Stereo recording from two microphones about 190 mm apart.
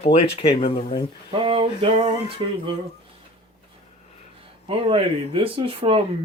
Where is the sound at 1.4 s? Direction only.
30° right (ahead or behind).